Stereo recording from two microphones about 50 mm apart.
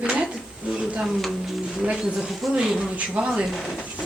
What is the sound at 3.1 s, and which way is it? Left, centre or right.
Speech, right.